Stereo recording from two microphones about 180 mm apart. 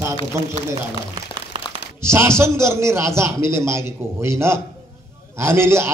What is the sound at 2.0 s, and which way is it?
A man's voice, 15° right (ahead or behind).